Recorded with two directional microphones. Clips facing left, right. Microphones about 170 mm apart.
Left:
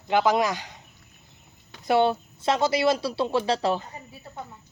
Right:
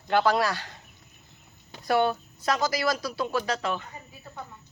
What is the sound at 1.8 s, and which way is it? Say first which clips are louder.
Speech: left 3 dB; 25° left (ahead or behind).